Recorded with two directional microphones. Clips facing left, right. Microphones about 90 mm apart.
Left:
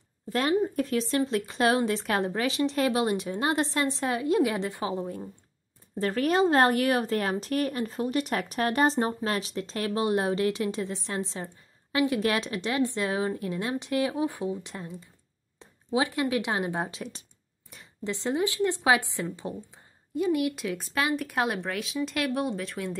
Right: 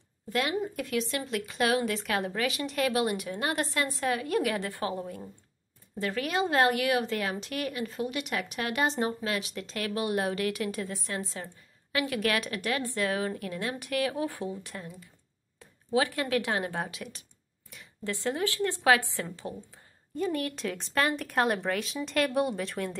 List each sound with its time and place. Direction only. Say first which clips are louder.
0.3 s a woman's voice: left 4 dB; 35° left (ahead or behind)
5.9 s a woman's voice: left 5 dB; 40° left (ahead or behind); by 16.9 s 20° left (ahead or behind)
16.9 s speech: left 3 dB; 30° left (ahead or behind)
18.0 s a woman's voice: left 3 dB; 20° left (ahead or behind); by 22.9 s centre (ahead or behind)